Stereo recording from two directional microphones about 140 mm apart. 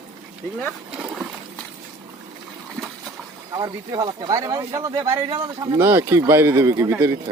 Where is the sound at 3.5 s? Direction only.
30° right (ahead or behind).